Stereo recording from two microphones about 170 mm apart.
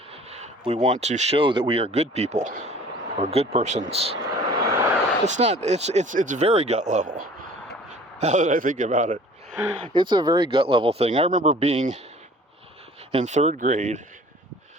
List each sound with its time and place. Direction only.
0.3 s speech: 40° right (ahead or behind)
3.2 s vehicle: 40° right (ahead or behind); by 4.9 s 20° right (ahead or behind)
5.2 s speech: 40° right (ahead or behind)
9.9 s speech: 25° right (ahead or behind)
13.1 s speech: 40° right (ahead or behind)